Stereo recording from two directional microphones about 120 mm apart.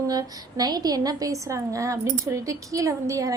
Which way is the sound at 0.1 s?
30° right (ahead or behind).